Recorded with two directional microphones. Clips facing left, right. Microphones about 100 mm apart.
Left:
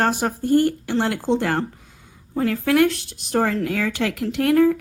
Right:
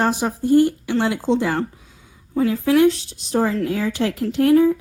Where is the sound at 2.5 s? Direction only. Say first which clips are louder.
Right 2 dB; 60° left (ahead or behind).